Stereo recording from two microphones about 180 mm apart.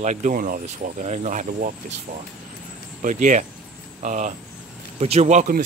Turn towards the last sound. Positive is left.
turn(degrees=-40)  # may be behind; listen again after turning